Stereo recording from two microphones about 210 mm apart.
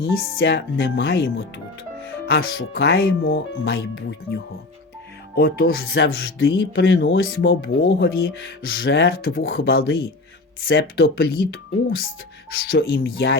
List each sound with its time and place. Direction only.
0.0 s speech: 50° left (ahead or behind)
5.4 s speech: 50° left (ahead or behind)
6.1 s speech: 60° left (ahead or behind)
12.7 s speech: 45° left (ahead or behind)